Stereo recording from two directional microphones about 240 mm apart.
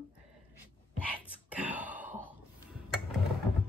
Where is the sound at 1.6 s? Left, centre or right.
Centre.